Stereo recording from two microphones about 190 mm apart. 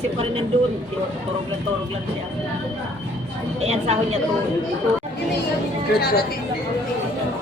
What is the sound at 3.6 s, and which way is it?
Speech, 35° right (ahead or behind).